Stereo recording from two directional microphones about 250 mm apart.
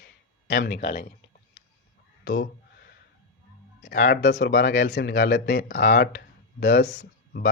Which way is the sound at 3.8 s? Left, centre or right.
Left.